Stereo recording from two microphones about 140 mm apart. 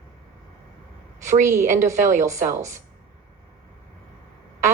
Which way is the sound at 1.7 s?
20° right (ahead or behind).